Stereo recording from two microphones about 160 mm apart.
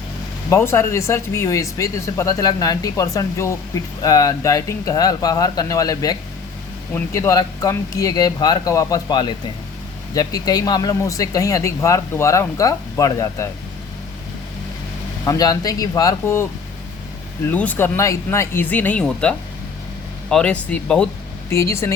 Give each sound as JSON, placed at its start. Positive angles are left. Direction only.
{"t": 0.5, "sound": "speech", "side_deg": 15}
{"t": 15.2, "sound": "speech", "side_deg": 20}
{"t": 21.5, "sound": "speech", "side_deg": 15}